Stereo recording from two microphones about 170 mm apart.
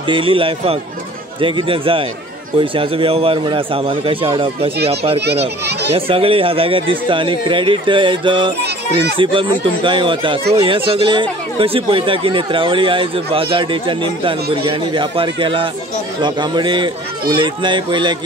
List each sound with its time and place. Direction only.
0.1 s speech: 30° right (ahead or behind)
5.7 s children playing: 75° right (ahead or behind)
5.9 s speech: 35° right (ahead or behind)